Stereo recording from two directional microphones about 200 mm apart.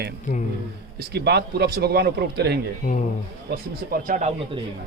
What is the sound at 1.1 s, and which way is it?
Speech, 55° right (ahead or behind).